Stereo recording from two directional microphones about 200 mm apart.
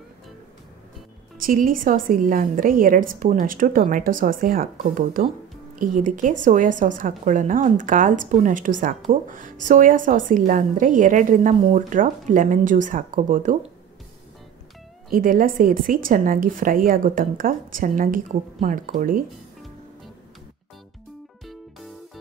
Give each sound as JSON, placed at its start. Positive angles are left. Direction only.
{"t": 1.4, "sound": "a woman's voice", "side_deg": -45}
{"t": 15.0, "sound": "speech", "side_deg": -45}
{"t": 21.5, "sound": "music", "side_deg": 0}